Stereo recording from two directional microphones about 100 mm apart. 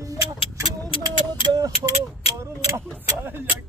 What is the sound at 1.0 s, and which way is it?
Speech, 35° right (ahead or behind).